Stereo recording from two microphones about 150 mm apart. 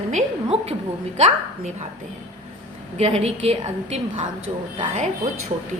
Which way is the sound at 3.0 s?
45° right (ahead or behind).